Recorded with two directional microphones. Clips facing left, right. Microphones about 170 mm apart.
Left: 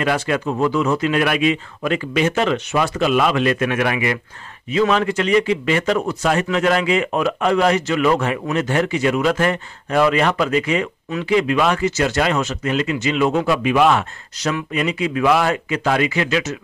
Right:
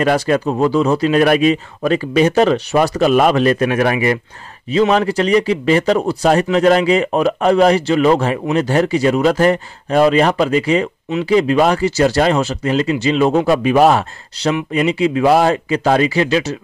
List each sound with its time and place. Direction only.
0.0 s speech: 40° right (ahead or behind)